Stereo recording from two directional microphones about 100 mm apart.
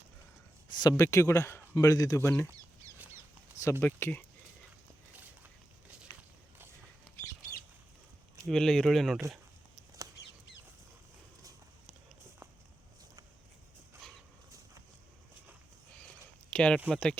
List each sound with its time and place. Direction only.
0.8 s speech: 40° left (ahead or behind)
1.0 s speech: 30° left (ahead or behind)
2.5 s chicken: 35° right (ahead or behind)
3.6 s speech: 25° left (ahead or behind)
5.1 s a sound: 20° right (ahead or behind)
8.4 s speech: 5° left (ahead or behind)
14.0 s dog: 10° left (ahead or behind)
16.5 s speech: 10° left (ahead or behind)